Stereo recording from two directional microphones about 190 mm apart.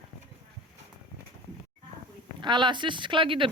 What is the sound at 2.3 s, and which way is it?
Speech, 25° right (ahead or behind).